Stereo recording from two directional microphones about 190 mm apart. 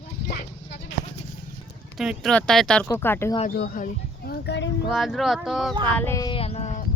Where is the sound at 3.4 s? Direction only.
55° left (ahead or behind).